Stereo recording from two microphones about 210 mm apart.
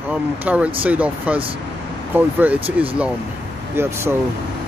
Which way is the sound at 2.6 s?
25° right (ahead or behind).